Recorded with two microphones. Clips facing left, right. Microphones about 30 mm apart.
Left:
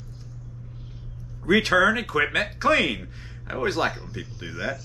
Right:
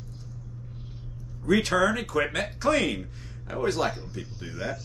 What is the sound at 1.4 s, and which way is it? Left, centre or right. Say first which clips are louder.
Speech: left 4 dB; left.